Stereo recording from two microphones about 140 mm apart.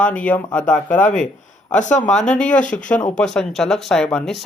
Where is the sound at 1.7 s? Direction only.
60° left (ahead or behind).